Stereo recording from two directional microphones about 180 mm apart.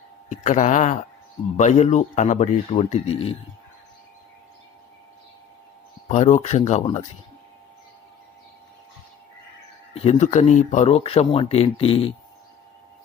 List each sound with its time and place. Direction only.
0.3 s speech: 40° left (ahead or behind)
6.1 s speech: 40° left (ahead or behind)
9.9 s speech: 35° left (ahead or behind)